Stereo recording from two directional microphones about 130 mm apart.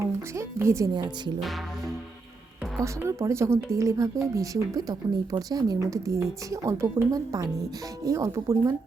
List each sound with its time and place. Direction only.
0.3 s speech: 20° right (ahead or behind)
2.8 s speech: 20° right (ahead or behind)